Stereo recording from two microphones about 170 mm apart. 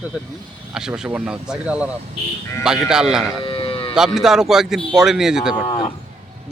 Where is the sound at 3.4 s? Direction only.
30° left (ahead or behind).